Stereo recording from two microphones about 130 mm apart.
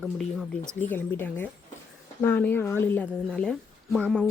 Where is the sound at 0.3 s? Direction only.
5° left (ahead or behind).